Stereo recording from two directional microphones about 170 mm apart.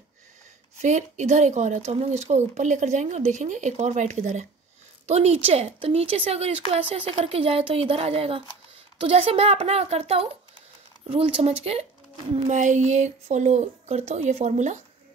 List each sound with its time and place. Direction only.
0.7 s speech: 45° right (ahead or behind)